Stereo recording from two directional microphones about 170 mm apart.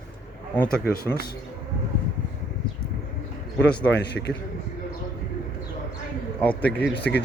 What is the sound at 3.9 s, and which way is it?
Speech, 90° left.